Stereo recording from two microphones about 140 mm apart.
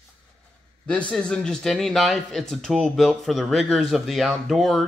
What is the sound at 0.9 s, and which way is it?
Speech, 10° left (ahead or behind).